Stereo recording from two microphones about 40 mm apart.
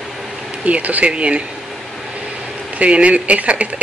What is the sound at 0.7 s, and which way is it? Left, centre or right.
Speech, right.